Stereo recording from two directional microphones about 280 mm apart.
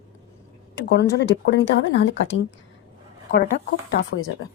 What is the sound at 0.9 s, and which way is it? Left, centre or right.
Speech, left.